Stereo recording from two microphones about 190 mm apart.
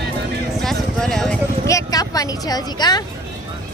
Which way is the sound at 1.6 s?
20° left (ahead or behind).